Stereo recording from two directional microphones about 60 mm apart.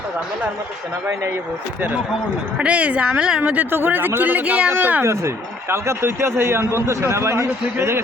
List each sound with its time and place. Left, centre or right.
2.6 s speech: right
5.0 s a man's voice: right